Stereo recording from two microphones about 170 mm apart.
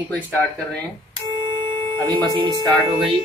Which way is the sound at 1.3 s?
30° right (ahead or behind).